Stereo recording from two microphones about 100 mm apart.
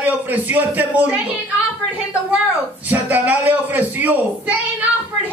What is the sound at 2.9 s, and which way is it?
A child's voice, 15° right (ahead or behind).